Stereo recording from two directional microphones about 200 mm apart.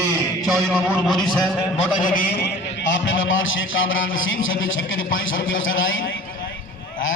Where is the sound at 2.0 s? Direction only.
45° left (ahead or behind).